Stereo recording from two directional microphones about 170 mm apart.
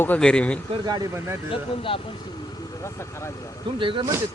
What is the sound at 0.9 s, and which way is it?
Speech, 20° right (ahead or behind).